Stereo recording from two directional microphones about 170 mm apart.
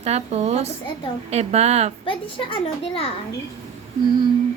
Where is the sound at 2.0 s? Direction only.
30° left (ahead or behind).